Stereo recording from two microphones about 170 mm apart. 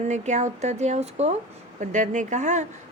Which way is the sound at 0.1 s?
45° right (ahead or behind).